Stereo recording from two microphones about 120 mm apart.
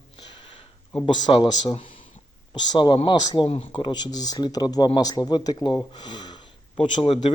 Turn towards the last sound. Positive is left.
turn(degrees=45)  # may be behind; listen again after turning